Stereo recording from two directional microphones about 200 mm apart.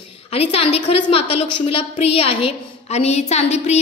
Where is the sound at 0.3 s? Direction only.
30° left (ahead or behind).